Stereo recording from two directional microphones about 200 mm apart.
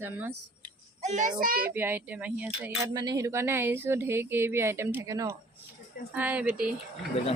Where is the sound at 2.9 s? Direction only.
20° right (ahead or behind).